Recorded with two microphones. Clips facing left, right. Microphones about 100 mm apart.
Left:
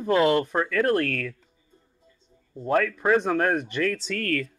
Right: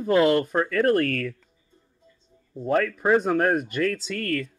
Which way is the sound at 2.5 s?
5° right (ahead or behind).